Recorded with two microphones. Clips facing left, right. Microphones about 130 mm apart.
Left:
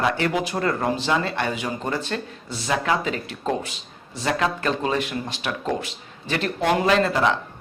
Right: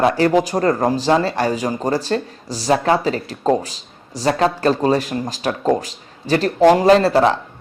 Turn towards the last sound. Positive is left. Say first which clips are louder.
# right 7 dB
turn(degrees=-35)  # may be behind; listen again after turning